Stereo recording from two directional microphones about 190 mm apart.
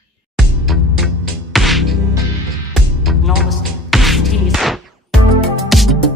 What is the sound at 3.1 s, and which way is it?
Music, centre (ahead or behind).